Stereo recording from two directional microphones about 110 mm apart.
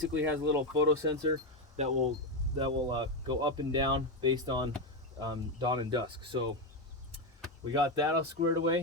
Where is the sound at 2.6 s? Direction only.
45° right (ahead or behind).